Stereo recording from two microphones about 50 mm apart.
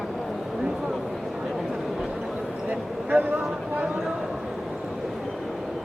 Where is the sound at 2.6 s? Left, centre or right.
Right.